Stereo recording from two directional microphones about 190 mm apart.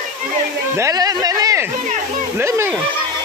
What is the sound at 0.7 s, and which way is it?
Speech, 15° right (ahead or behind).